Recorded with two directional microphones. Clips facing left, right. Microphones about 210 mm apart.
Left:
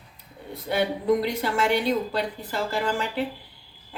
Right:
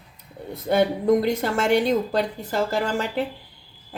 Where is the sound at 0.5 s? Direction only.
45° right (ahead or behind).